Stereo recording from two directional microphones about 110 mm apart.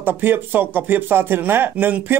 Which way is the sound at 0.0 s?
20° right (ahead or behind).